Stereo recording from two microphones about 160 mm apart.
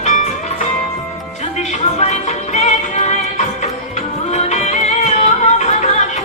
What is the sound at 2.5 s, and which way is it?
Music, 45° left (ahead or behind).